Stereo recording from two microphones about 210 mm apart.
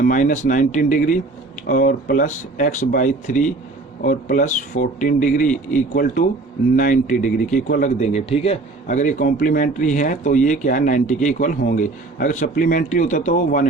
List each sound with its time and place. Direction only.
0.0 s speech: 40° left (ahead or behind)